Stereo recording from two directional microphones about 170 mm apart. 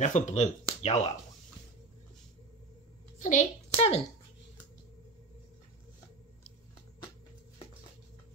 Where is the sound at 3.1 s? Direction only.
45° left (ahead or behind).